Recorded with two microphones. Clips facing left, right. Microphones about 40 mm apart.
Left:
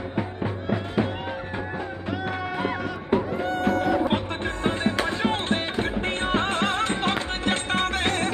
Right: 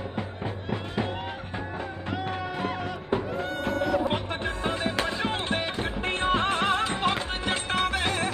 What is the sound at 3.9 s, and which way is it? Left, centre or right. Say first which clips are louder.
Music: left 3 dB; left.